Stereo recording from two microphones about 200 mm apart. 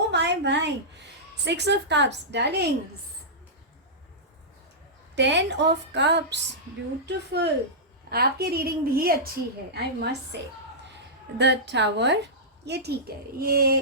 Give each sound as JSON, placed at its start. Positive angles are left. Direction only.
{"t": 0.1, "sound": "a sound", "side_deg": -60}
{"t": 1.5, "sound": "a woman's voice", "side_deg": -60}
{"t": 5.1, "sound": "a woman's voice", "side_deg": -60}